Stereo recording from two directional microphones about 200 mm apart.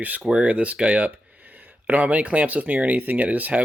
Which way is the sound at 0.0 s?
5° right (ahead or behind).